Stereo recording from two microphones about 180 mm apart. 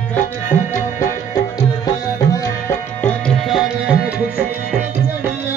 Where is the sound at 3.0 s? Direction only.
Centre (ahead or behind).